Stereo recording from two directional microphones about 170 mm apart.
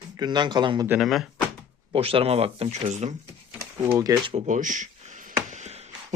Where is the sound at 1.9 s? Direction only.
35° right (ahead or behind).